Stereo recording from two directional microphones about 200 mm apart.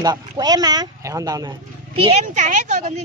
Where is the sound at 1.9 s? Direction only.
30° right (ahead or behind).